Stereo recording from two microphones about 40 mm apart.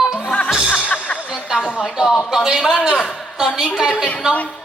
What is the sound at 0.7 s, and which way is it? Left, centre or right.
Music, left.